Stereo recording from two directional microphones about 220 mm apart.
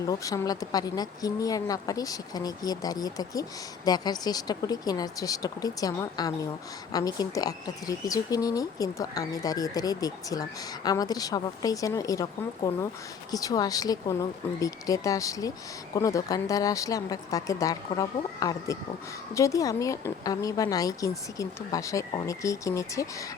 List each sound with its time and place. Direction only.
0.0 s a woman's voice: 15° left (ahead or behind)